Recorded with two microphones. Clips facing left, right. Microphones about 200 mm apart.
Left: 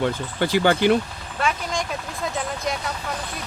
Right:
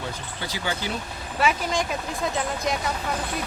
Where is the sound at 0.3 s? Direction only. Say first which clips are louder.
Left 12 dB; 65° left (ahead or behind).